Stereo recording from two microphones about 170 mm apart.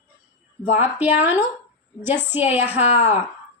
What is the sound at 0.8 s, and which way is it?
Speech, 10° right (ahead or behind).